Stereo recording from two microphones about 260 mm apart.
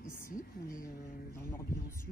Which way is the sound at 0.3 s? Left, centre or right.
Left.